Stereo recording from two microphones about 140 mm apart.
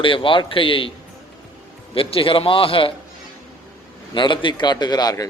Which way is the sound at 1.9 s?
40° left (ahead or behind).